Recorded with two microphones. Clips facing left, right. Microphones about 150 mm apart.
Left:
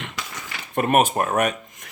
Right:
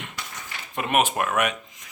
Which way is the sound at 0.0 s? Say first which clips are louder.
Left 4 dB; 90° left.